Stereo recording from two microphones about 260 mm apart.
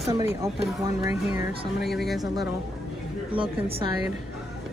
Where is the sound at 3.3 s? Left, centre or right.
Right.